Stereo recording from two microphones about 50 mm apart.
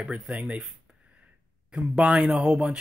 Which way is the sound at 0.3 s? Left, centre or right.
Right.